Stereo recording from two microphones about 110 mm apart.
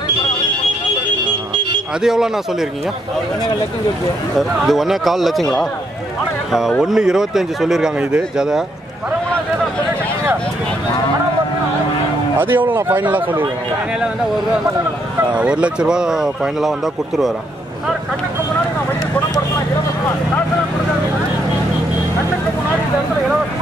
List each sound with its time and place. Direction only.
4.4 s speech: centre (ahead or behind)
6.8 s speech: 5° right (ahead or behind)
12.4 s speech: 20° right (ahead or behind)
15.3 s speech: 10° right (ahead or behind)